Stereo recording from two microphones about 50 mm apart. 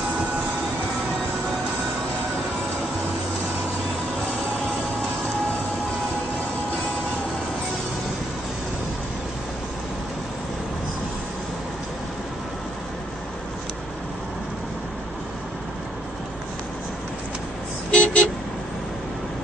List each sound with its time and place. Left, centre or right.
17.9 s vehicle: left